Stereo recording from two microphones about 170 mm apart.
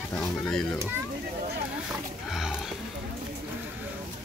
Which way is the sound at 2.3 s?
5° right (ahead or behind).